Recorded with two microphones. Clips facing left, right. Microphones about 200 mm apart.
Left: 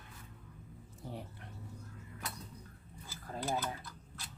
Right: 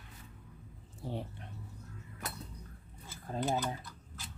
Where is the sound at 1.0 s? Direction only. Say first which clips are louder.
Right 5 dB; 30° right (ahead or behind).